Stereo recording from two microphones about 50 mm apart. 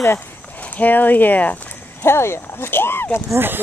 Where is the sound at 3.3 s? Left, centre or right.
Right.